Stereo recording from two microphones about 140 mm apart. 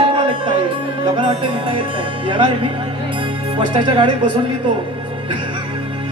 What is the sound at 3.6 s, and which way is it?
Speech, 35° right (ahead or behind).